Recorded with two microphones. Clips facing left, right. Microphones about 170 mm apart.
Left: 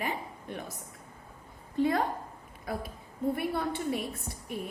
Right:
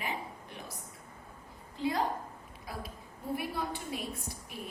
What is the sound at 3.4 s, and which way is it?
Speech, 60° left (ahead or behind).